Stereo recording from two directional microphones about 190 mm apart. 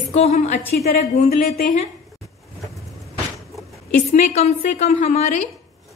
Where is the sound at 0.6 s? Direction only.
10° left (ahead or behind).